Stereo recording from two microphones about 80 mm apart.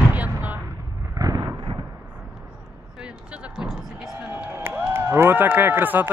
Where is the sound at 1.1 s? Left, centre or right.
Right.